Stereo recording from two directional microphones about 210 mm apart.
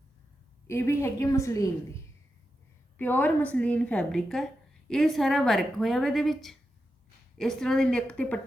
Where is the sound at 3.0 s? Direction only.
10° left (ahead or behind).